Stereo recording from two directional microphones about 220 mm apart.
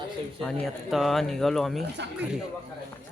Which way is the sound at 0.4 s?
5° left (ahead or behind).